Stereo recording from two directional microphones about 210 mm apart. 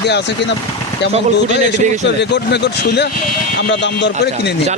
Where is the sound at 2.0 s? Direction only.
55° left (ahead or behind).